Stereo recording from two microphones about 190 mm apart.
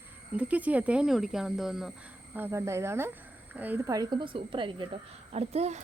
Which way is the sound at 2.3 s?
10° right (ahead or behind).